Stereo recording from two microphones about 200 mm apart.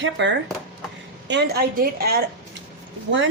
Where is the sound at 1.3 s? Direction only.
55° right (ahead or behind).